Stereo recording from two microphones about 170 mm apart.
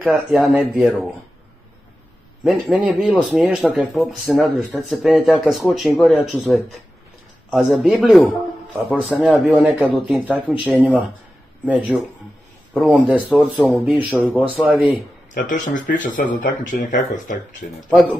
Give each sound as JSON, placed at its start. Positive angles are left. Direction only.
{"t": 0.0, "sound": "a man's voice", "side_deg": 0}
{"t": 2.4, "sound": "a man's voice", "side_deg": -5}
{"t": 9.3, "sound": "a man's voice", "side_deg": -5}
{"t": 15.3, "sound": "speech", "side_deg": 45}